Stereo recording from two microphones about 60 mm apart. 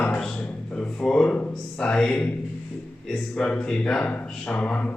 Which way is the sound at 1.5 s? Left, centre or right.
Centre.